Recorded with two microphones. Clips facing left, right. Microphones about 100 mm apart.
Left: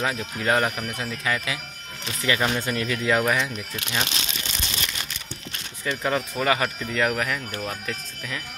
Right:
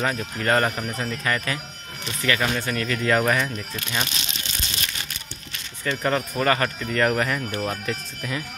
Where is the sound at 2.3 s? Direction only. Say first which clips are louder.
Even; 15° left (ahead or behind).